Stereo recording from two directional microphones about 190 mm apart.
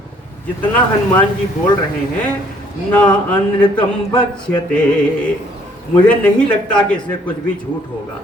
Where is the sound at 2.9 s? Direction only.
5° left (ahead or behind).